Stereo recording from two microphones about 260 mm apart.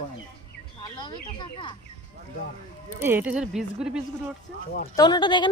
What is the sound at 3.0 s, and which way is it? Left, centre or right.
Speech, centre.